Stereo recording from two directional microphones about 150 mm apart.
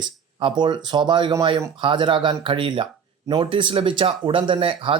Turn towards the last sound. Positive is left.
turn(degrees=-35)  # may be behind; listen again after turning